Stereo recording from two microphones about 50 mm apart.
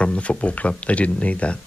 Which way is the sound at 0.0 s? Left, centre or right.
Left.